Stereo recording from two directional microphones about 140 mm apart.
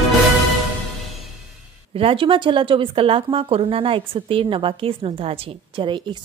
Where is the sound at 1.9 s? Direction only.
40° right (ahead or behind).